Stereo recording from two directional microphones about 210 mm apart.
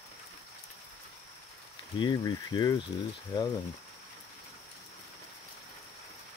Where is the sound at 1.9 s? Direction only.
20° left (ahead or behind).